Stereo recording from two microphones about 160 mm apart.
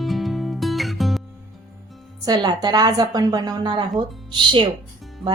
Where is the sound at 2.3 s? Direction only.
25° right (ahead or behind).